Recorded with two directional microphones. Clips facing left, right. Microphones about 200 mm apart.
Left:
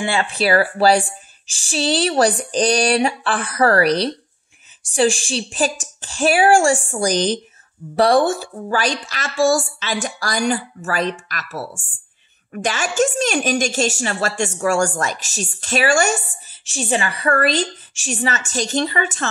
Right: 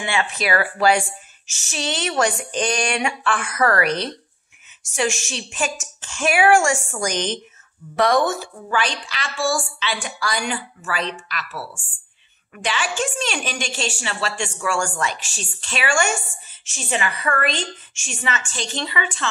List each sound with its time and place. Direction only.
0.0 s a woman's voice: 35° left (ahead or behind)